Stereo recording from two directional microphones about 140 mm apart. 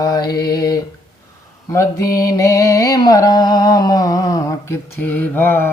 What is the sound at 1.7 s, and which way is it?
Mantra, 25° left (ahead or behind).